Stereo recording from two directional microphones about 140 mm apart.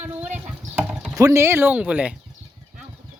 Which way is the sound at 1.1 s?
20° right (ahead or behind).